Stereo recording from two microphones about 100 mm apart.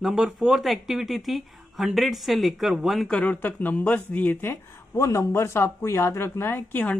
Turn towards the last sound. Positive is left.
turn(degrees=20)  # may be behind; listen again after turning